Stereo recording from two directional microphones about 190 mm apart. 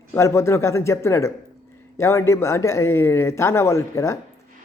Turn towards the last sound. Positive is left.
turn(degrees=15)  # may be behind; listen again after turning